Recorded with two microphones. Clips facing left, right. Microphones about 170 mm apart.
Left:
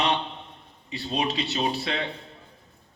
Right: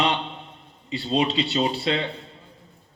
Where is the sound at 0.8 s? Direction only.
25° right (ahead or behind).